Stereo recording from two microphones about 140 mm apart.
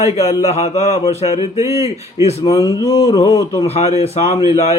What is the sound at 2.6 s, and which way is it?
Speech, 25° left (ahead or behind).